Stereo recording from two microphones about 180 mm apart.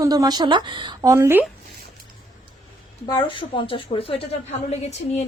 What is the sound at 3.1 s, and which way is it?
A woman's voice, 30° left (ahead or behind).